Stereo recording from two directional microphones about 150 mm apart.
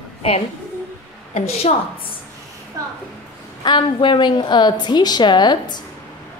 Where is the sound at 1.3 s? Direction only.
50° left (ahead or behind).